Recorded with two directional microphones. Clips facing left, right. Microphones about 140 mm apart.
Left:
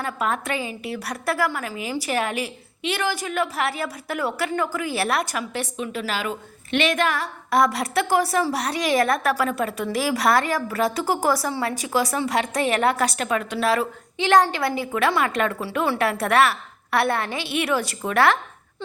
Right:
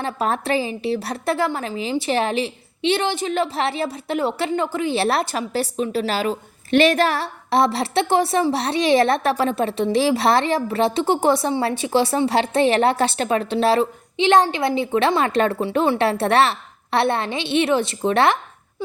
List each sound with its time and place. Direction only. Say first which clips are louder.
0.0 s a woman's voice: right 3 dB; 30° right (ahead or behind)